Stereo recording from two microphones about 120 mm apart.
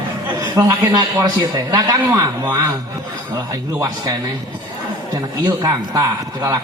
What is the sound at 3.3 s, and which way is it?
A man's voice, 30° right (ahead or behind).